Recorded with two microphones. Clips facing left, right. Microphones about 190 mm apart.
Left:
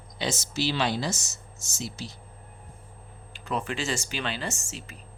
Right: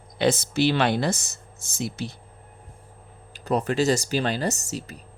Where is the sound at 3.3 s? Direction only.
40° right (ahead or behind).